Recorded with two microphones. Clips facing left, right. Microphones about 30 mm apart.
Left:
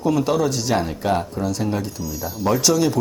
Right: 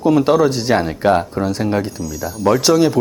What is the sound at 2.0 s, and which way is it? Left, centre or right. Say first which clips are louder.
Speech: right 4 dB; centre.